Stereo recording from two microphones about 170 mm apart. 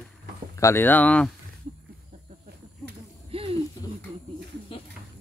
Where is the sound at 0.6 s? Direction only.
15° left (ahead or behind).